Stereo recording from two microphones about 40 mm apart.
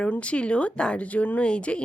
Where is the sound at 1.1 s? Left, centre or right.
Left.